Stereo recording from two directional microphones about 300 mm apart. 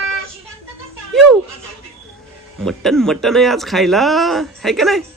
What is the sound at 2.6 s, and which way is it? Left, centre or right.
Speech, centre.